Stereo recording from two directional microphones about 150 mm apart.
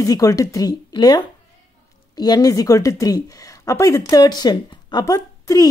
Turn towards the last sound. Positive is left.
turn(degrees=25)  # may be behind; listen again after turning